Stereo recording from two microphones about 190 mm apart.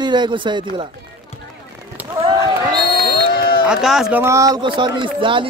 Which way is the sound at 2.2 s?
25° right (ahead or behind).